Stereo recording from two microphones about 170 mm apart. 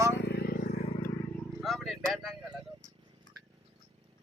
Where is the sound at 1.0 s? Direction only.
10° left (ahead or behind).